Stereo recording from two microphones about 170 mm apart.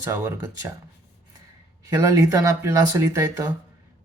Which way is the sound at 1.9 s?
20° right (ahead or behind).